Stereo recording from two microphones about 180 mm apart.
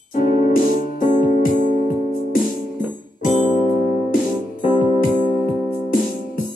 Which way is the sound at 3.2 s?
45° left (ahead or behind).